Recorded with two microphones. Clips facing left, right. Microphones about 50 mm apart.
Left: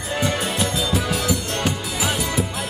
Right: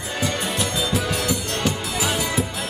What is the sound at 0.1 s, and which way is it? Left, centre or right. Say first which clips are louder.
Music: left 2 dB; centre.